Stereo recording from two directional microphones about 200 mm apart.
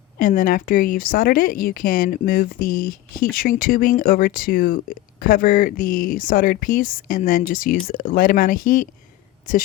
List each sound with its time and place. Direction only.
0.2 s speech: 40° left (ahead or behind)